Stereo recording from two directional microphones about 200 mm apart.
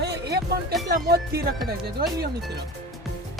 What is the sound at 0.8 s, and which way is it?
Music, 50° right (ahead or behind).